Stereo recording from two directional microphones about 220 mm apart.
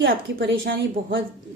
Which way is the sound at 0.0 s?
55° right (ahead or behind).